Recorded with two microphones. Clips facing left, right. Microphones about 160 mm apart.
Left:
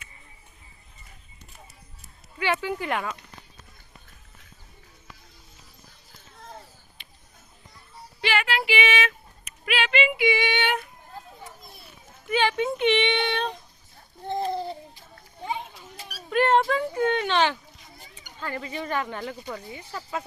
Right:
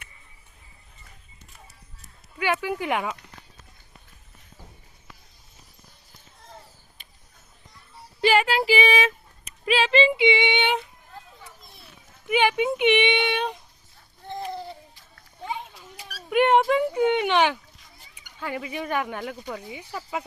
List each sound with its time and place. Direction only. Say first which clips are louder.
2.4 s speech: right 1 dB; 10° right (ahead or behind)
8.2 s a sound: right 6 dB; 40° right (ahead or behind); by 10.8 s 20° right (ahead or behind)
12.3 s speech: right 2 dB; 15° right (ahead or behind)
14.3 s babbling: left 5 dB; 30° left (ahead or behind)
16.3 s speech: right 2 dB; 15° right (ahead or behind)